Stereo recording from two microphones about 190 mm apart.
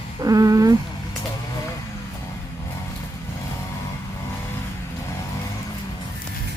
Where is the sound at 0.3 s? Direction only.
20° right (ahead or behind).